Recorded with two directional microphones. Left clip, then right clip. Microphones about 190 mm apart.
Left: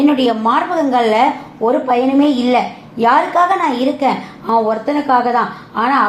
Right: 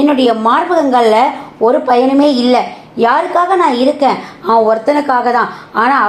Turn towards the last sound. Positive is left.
turn(degrees=-25)  # may be behind; listen again after turning